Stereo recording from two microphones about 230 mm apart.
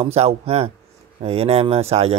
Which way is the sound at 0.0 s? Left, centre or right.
Right.